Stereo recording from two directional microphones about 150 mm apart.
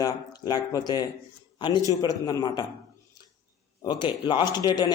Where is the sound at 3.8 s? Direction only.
30° left (ahead or behind).